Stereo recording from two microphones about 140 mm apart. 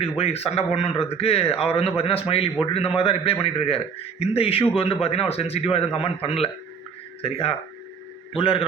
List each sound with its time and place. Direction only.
0.0 s a man's voice: 50° left (ahead or behind)